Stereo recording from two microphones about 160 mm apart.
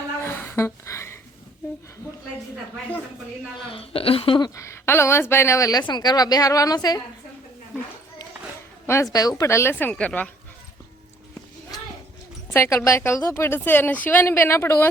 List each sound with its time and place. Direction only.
0.2 s a sound: 15° left (ahead or behind)
3.7 s a woman's voice: 35° left (ahead or behind)
9.1 s a woman's voice: 20° left (ahead or behind)
12.5 s a woman's voice: 20° left (ahead or behind)